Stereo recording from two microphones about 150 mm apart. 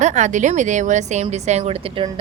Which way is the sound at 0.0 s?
50° right (ahead or behind).